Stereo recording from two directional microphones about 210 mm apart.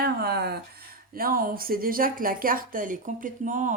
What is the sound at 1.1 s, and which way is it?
A woman's voice, 45° right (ahead or behind).